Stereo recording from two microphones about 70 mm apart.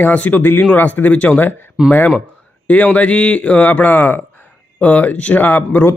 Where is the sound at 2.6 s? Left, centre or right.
Centre.